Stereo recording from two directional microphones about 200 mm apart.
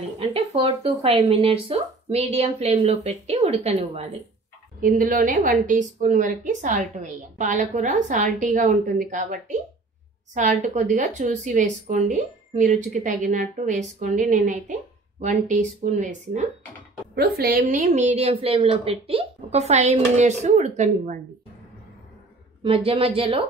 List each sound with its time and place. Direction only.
0.2 s a woman's voice: 30° right (ahead or behind)
4.8 s a woman's voice: 45° right (ahead or behind)
17.1 s a woman's voice: 50° right (ahead or behind)
22.6 s a woman's voice: 25° right (ahead or behind)